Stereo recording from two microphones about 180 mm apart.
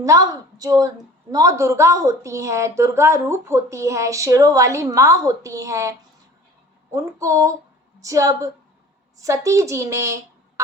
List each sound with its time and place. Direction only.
0.0 s a woman's voice: 20° right (ahead or behind)
6.9 s a woman's voice: 15° right (ahead or behind)